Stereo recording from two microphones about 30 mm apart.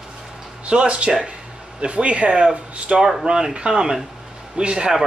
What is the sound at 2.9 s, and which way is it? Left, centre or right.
Speech, right.